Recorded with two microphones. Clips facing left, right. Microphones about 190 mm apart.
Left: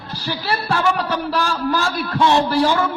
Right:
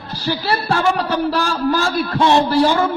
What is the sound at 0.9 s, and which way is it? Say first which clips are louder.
A man's voice: right 3 dB; 30° right (ahead or behind).